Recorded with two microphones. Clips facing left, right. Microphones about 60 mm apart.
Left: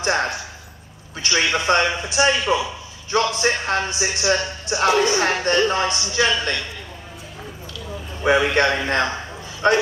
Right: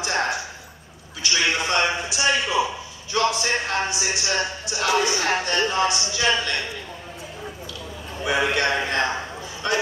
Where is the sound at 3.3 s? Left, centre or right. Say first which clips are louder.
Left 3 dB; left.